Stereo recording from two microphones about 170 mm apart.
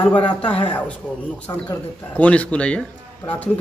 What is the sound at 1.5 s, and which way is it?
Speech, 25° left (ahead or behind).